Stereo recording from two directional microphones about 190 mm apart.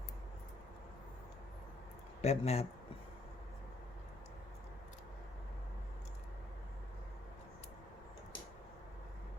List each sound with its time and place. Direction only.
2.2 s speech: 35° left (ahead or behind)